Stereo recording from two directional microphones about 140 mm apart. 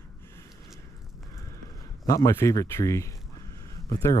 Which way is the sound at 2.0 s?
20° left (ahead or behind).